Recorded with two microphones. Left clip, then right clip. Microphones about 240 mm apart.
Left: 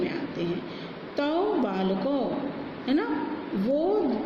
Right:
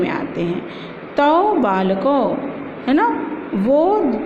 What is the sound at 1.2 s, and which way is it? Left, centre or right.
A woman's voice, right.